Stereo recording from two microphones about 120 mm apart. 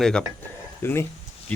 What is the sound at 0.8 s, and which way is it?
Speech, 20° left (ahead or behind).